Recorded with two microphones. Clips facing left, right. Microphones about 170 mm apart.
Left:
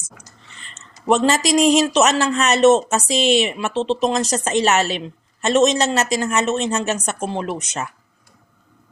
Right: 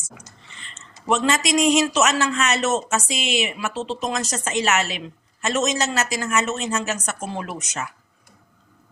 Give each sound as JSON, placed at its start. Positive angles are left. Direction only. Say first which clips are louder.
{"t": 0.7, "sound": "a woman's voice", "louder": "left 5 dB", "side_deg": 35}